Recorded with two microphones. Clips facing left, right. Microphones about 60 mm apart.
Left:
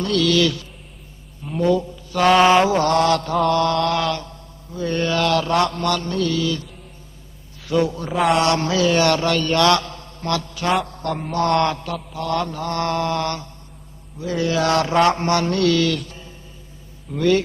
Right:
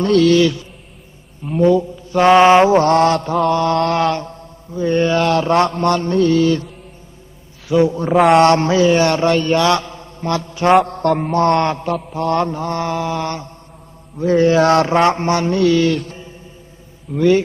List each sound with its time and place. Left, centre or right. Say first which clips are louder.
0.0 s mantra: right 6 dB; right
7.7 s mantra: right 6 dB; right
10.8 s mantra: right 9 dB; right
11.3 s a man's voice: even; right
12.1 s mantra: right 4 dB; right
12.8 s mantra: left 2 dB; centre
13.2 s mantra: right 2 dB; right
14.2 s mantra: right 8 dB; right
17.2 s mantra: right 4 dB; centre